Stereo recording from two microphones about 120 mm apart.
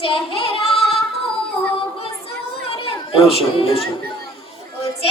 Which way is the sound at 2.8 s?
55° left (ahead or behind).